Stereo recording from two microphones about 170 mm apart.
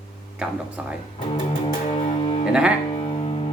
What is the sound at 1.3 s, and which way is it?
Music, 35° left (ahead or behind).